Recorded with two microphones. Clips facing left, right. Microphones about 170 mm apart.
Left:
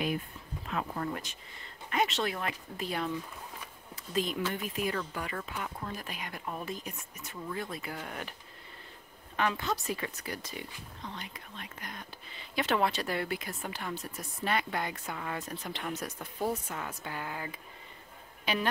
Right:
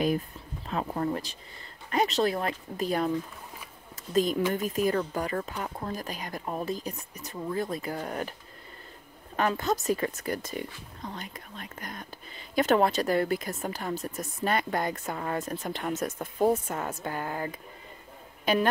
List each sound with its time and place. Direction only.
0.7 s speech: 35° right (ahead or behind)
9.4 s a woman's voice: 45° right (ahead or behind)